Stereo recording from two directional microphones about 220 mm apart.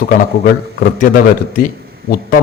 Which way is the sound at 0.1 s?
40° left (ahead or behind).